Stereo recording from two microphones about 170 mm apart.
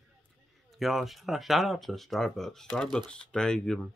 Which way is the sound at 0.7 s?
Centre (ahead or behind).